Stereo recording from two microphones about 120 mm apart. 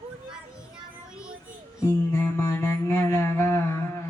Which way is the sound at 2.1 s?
20° left (ahead or behind).